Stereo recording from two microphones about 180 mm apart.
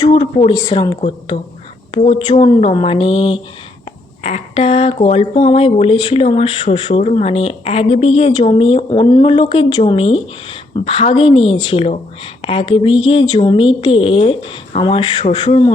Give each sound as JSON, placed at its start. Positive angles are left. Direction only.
{"t": 0.1, "sound": "speech", "side_deg": 30}